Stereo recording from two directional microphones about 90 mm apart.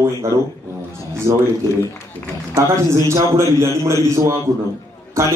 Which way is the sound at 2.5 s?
30° right (ahead or behind).